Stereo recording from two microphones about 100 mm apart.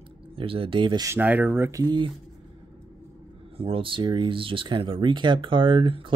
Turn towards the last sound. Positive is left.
turn(degrees=-55)  # may be behind; listen again after turning